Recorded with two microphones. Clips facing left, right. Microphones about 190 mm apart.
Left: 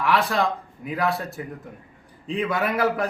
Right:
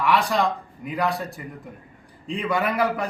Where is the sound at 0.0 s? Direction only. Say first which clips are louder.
Right 1 dB; centre (ahead or behind).